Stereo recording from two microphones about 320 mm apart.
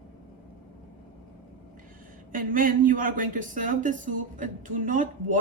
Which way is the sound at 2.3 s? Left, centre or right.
Right.